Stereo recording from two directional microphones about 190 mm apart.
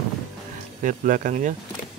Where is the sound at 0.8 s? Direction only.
45° right (ahead or behind).